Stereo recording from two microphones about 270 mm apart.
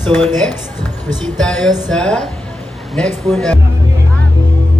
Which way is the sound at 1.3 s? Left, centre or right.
Centre.